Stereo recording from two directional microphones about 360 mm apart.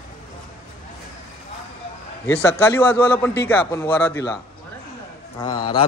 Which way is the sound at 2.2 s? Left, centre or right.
Centre.